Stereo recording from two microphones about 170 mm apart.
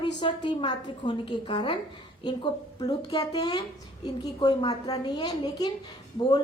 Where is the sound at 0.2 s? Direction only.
25° left (ahead or behind).